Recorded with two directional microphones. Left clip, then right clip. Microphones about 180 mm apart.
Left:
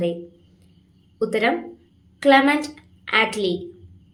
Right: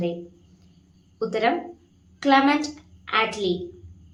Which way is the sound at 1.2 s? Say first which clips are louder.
Left 2 dB; 20° left (ahead or behind).